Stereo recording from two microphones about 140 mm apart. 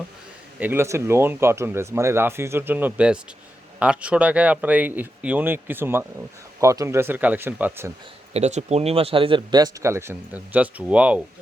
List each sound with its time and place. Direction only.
0.6 s speech: 15° right (ahead or behind)
8.3 s speech: 55° right (ahead or behind); by 11.2 s 10° right (ahead or behind)